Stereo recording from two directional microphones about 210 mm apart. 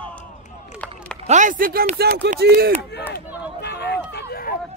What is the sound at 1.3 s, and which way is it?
A man's voice, 35° right (ahead or behind).